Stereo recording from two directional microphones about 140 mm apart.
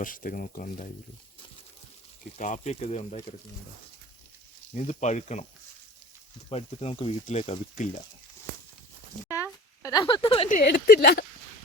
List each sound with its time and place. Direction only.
0.0 s speech: 80° left
2.4 s speech: 60° left (ahead or behind)
4.7 s speech: 55° left (ahead or behind)
6.5 s speech: 50° left (ahead or behind)
7.3 s speech: 55° left (ahead or behind)
9.3 s speech: 25° left (ahead or behind); by 10.5 s 40° left (ahead or behind)
10.5 s speech: 90° left